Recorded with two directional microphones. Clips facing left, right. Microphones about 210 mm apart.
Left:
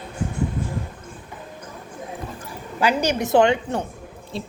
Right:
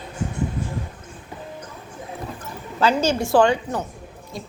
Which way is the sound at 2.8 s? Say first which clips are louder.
Right 1 dB; 15° left (ahead or behind).